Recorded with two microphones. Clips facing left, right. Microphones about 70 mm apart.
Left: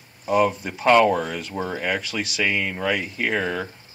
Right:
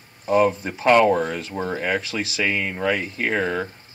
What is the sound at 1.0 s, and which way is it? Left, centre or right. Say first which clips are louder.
Speech: right 2 dB; right.